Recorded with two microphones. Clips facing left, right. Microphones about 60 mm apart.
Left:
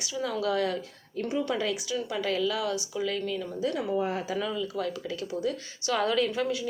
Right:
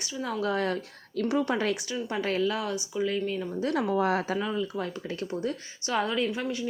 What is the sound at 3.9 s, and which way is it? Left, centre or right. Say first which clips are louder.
Speech: right 3 dB; right.